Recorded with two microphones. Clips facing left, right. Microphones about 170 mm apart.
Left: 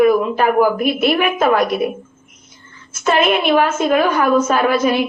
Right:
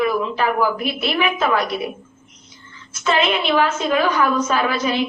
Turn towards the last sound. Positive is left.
turn(degrees=50)  # may be behind; listen again after turning